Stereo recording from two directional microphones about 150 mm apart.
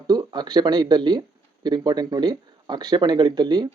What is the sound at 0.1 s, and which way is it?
Speech, 30° right (ahead or behind).